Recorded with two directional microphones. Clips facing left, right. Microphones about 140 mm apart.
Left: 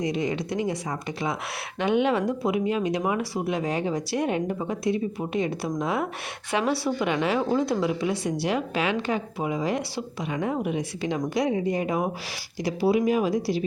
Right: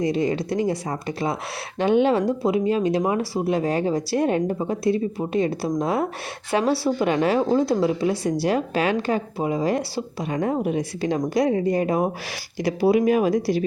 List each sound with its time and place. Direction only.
0.0 s a woman's voice: 35° right (ahead or behind)
7.4 s a woman's voice: 30° right (ahead or behind)
12.6 s speech: 55° right (ahead or behind)